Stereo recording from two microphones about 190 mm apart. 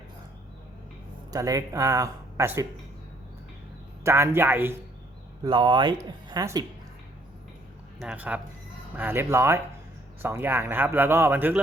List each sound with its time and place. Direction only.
1.3 s speech: 20° right (ahead or behind)
4.0 s speech: 15° right (ahead or behind)
5.4 s speech: 25° right (ahead or behind)
7.9 s speech: 5° right (ahead or behind)